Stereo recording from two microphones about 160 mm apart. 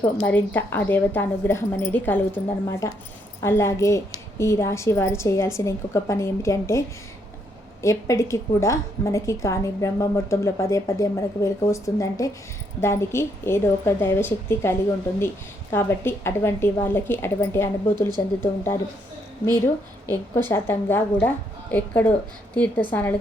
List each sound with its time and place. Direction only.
0.3 s a woman's voice: 10° left (ahead or behind)
20.1 s a woman's voice: 15° left (ahead or behind)